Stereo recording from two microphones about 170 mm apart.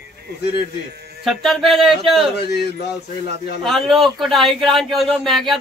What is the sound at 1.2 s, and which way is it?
Speech, centre (ahead or behind).